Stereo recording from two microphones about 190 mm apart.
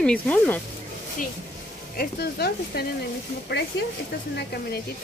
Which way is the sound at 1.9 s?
55° left (ahead or behind).